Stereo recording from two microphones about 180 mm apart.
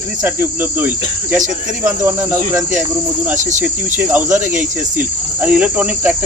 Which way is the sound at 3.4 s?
45° right (ahead or behind).